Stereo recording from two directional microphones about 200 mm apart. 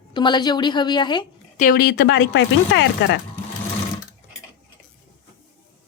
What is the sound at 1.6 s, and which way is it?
Speech, 45° left (ahead or behind).